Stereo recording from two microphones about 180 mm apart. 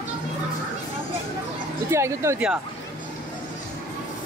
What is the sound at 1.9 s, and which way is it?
Speech, 15° right (ahead or behind).